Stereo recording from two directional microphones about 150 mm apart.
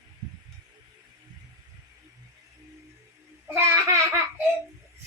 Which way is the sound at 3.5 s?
20° right (ahead or behind).